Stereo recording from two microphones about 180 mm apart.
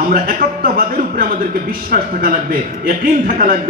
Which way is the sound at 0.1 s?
55° right (ahead or behind).